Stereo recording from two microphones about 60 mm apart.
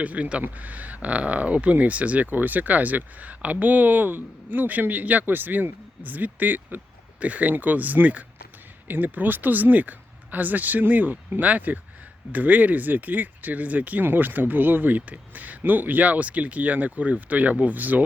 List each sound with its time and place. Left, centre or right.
0.0 s speech: right